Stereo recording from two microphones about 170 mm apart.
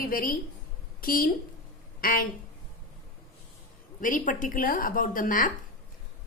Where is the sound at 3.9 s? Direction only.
50° left (ahead or behind).